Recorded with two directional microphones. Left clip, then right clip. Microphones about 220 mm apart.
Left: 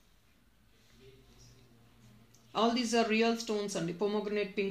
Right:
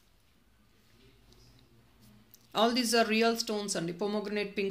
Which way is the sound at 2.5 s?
30° right (ahead or behind).